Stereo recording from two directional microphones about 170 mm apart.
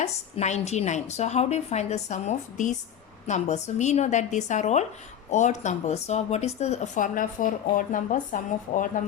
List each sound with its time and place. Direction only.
0.0 s a woman's voice: 40° left (ahead or behind)